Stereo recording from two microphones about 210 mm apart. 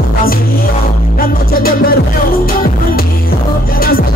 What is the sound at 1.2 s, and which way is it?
Music, 45° left (ahead or behind).